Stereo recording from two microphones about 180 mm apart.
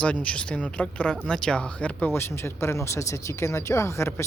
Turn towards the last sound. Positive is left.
turn(degrees=15)  # may be behind; listen again after turning